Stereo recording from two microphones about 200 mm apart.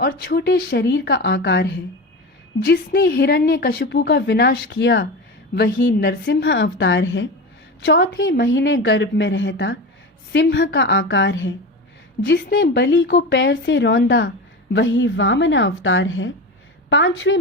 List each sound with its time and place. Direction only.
0.0 s a woman's voice: 50° left (ahead or behind); by 17.3 s 70° left (ahead or behind)